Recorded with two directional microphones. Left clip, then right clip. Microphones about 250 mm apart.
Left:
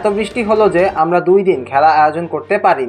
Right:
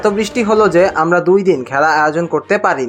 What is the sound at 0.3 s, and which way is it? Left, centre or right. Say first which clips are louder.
A man's voice: right 1 dB; right.